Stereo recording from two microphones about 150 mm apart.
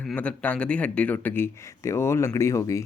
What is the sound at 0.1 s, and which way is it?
Speech, 10° left (ahead or behind).